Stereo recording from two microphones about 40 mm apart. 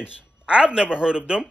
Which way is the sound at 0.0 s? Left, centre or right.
Right.